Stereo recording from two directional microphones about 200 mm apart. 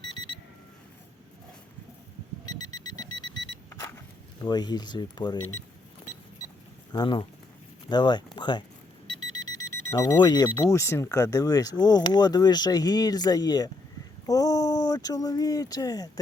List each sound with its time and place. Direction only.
2.7 s alarm clock: 20° left (ahead or behind)
3.7 s a sound: 15° left (ahead or behind)
4.4 s speech: 20° left (ahead or behind)
6.9 s speech: 20° left (ahead or behind)
9.9 s speech: 20° left (ahead or behind)